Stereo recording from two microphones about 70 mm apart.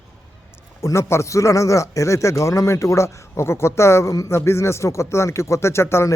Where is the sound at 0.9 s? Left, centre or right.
Left.